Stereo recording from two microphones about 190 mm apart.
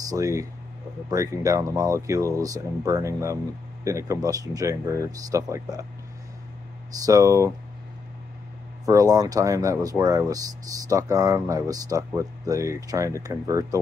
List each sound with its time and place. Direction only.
0.1 s speech: 15° right (ahead or behind)
7.1 s speech: 15° right (ahead or behind)
8.8 s speech: 20° right (ahead or behind)